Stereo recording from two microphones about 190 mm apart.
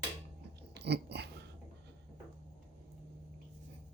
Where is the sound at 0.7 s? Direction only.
60° right (ahead or behind).